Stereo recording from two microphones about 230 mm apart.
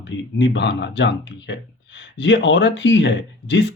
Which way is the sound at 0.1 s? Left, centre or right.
Left.